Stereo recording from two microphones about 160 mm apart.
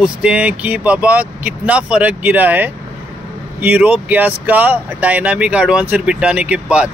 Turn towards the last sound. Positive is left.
turn(degrees=-5)  # may be behind; listen again after turning